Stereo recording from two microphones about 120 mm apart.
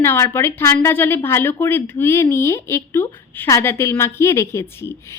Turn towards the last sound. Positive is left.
turn(degrees=20)  # may be behind; listen again after turning